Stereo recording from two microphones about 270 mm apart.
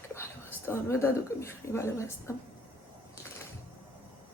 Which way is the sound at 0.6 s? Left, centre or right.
Centre.